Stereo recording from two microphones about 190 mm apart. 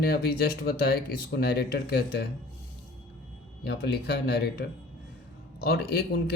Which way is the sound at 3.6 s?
60° left (ahead or behind).